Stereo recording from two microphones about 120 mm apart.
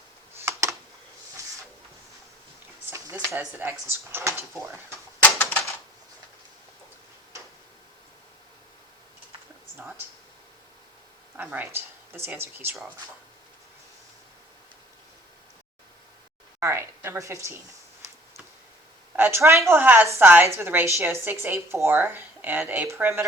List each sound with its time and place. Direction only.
0.3 s computer keyboard: 25° right (ahead or behind)
2.9 s a sound: 25° right (ahead or behind)
3.3 s a woman's voice: 20° right (ahead or behind)
5.2 s typewriter: 10° left (ahead or behind)
11.3 s speech: 15° right (ahead or behind)
16.6 s a sound: 20° right (ahead or behind)
19.1 s a woman's voice: 20° right (ahead or behind)